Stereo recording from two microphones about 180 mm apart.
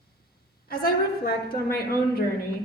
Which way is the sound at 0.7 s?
55° left (ahead or behind).